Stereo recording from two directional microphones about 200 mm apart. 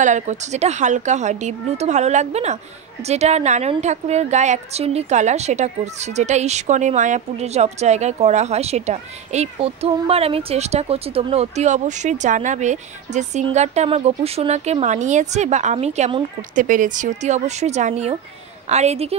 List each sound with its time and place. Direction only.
0.0 s speech: 35° right (ahead or behind)
16.5 s speech: 40° right (ahead or behind)